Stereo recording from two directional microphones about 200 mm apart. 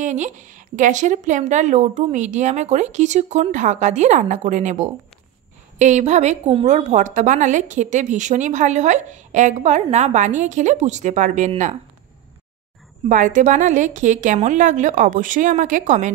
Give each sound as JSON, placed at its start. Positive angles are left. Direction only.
{"t": 0.0, "sound": "a woman's voice", "side_deg": -35}
{"t": 13.1, "sound": "a woman's voice", "side_deg": -40}